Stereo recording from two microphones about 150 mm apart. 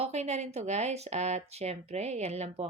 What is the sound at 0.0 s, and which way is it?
Speech, 45° right (ahead or behind).